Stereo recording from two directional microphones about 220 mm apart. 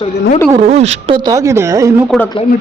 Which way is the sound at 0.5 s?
30° right (ahead or behind).